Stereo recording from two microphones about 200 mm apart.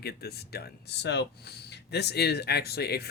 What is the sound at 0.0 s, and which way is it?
Speech, 50° left (ahead or behind).